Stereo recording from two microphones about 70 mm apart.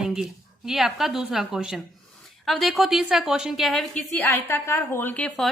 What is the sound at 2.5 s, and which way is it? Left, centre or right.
A woman's voice, centre.